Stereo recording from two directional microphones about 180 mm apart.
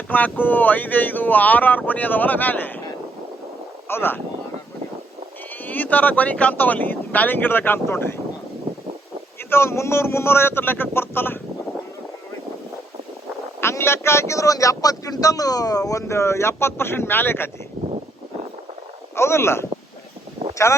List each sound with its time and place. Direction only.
0.1 s speech: 10° left (ahead or behind)
3.8 s speech: 10° left (ahead or behind)
5.6 s speech: 10° left (ahead or behind)
9.5 s speech: 15° left (ahead or behind)
13.6 s speech: 15° left (ahead or behind)
19.1 s speech: 15° left (ahead or behind)
20.7 s speech: 15° left (ahead or behind)